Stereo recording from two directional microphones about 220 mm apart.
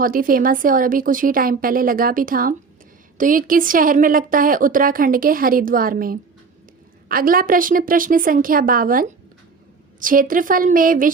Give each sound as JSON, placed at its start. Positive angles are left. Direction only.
{"t": 0.0, "sound": "a woman's voice", "side_deg": -40}